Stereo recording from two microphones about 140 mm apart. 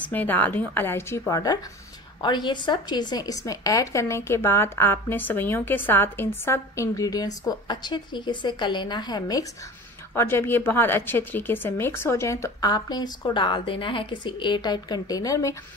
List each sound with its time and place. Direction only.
0.0 s a woman's voice: 15° left (ahead or behind); by 9.5 s 30° left (ahead or behind)
10.1 s a woman's voice: 15° left (ahead or behind)